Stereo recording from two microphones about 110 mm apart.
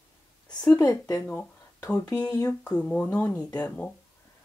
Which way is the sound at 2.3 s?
30° left (ahead or behind).